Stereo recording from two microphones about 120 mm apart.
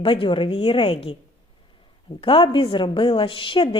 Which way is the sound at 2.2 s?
45° left (ahead or behind).